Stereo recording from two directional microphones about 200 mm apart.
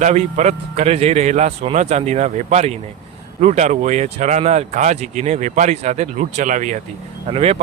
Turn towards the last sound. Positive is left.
turn(degrees=-30)  # may be behind; listen again after turning